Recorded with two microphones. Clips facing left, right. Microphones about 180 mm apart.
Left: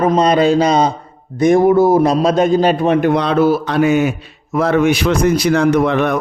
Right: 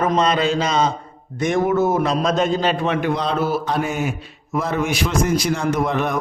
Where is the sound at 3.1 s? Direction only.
65° left (ahead or behind).